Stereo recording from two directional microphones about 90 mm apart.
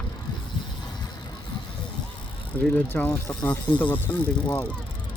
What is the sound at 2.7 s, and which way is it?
Speech, 20° left (ahead or behind).